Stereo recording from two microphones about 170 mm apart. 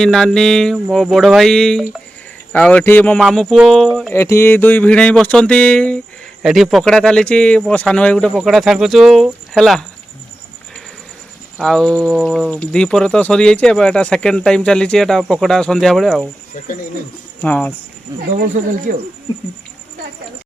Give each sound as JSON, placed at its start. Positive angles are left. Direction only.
{"t": 0.0, "sound": "speech", "side_deg": 5}
{"t": 3.2, "sound": "speech", "side_deg": 0}
{"t": 4.1, "sound": "speech", "side_deg": 15}
{"t": 11.5, "sound": "speech", "side_deg": 0}
{"t": 16.6, "sound": "speech", "side_deg": 50}
{"t": 17.4, "sound": "speech", "side_deg": 10}
{"t": 18.3, "sound": "speech", "side_deg": -50}